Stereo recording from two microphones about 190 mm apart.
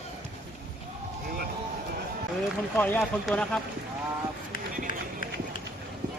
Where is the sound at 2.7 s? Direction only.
10° left (ahead or behind).